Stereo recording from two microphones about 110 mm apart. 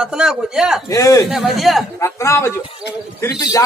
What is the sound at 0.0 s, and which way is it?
Speech, 5° right (ahead or behind).